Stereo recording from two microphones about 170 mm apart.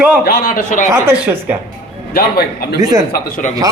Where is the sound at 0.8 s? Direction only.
15° right (ahead or behind).